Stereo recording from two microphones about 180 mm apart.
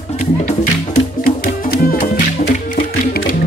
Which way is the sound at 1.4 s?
60° left (ahead or behind).